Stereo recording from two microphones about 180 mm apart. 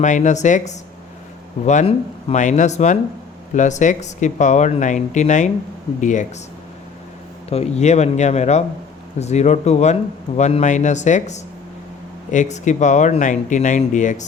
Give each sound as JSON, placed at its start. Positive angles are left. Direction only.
{"t": 0.0, "sound": "a man's voice", "side_deg": 45}
{"t": 7.5, "sound": "a man's voice", "side_deg": 35}